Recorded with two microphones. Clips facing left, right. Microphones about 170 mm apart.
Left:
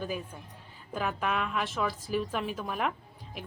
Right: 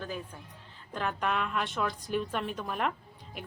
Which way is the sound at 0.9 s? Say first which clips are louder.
Even; 5° left (ahead or behind).